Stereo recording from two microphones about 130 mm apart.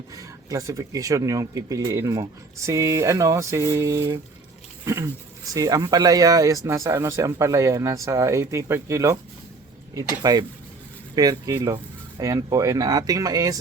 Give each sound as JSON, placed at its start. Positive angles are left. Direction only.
{"t": 0.1, "sound": "speech", "side_deg": -25}